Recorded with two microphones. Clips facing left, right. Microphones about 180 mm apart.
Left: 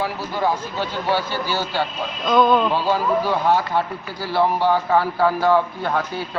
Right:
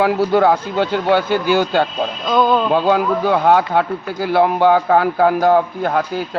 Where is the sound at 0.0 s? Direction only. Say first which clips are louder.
Right 9 dB; 70° right (ahead or behind).